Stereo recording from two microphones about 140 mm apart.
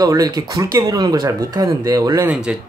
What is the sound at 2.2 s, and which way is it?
Speech, 5° right (ahead or behind).